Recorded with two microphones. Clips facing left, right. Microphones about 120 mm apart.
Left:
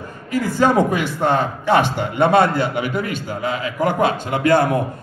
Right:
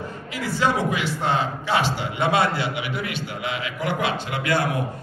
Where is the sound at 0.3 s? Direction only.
45° left (ahead or behind).